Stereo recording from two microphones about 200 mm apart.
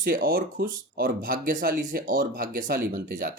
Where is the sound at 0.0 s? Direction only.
45° right (ahead or behind).